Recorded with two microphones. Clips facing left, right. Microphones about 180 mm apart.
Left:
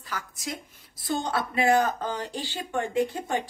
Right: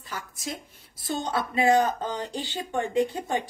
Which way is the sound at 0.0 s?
25° right (ahead or behind).